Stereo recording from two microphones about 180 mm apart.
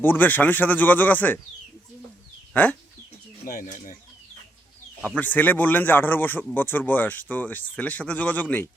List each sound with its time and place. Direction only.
0.0 s a man's voice: 10° left (ahead or behind)
2.5 s speech: 10° left (ahead or behind)
3.4 s speech: 50° left (ahead or behind)
5.0 s a man's voice: 10° left (ahead or behind)